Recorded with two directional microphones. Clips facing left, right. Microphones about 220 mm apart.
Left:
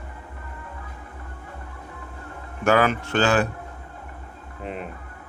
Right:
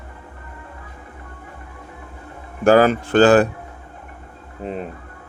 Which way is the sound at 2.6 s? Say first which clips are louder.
Right 6 dB; 35° right (ahead or behind).